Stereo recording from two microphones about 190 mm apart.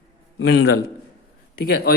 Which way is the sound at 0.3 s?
60° left (ahead or behind).